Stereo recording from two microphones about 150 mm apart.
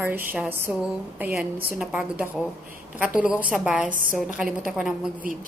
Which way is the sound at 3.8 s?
65° right (ahead or behind).